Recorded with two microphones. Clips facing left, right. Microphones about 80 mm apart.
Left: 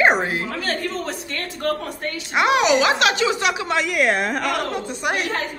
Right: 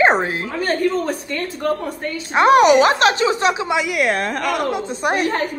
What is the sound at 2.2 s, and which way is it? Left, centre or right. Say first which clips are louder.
A woman's voice: right 6 dB; right.